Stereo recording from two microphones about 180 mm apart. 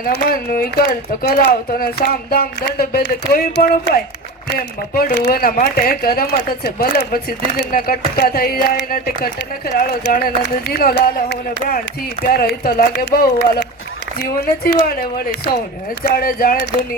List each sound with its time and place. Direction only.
0.0 s speech: 55° left (ahead or behind)
13.1 s speech: 80° left
14.2 s speech: 60° left (ahead or behind)